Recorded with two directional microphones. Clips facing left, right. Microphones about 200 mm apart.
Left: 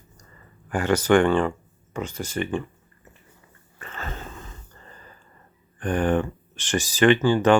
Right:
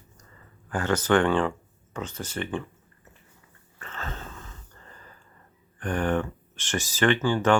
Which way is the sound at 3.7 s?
10° left (ahead or behind).